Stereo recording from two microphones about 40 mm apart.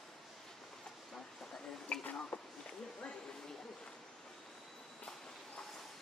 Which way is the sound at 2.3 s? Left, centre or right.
Left.